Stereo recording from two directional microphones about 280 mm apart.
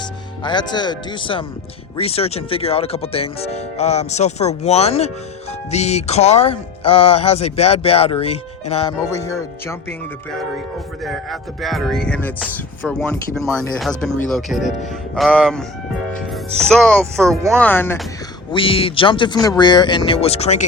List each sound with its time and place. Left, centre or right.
0.4 s speech: centre
11.0 s music: centre
17.6 s speech: centre
18.5 s speech: centre